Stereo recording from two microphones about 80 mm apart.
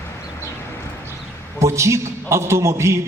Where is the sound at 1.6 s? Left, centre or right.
Right.